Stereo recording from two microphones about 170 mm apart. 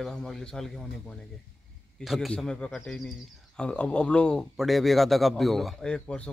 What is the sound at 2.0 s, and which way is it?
Speech, centre (ahead or behind).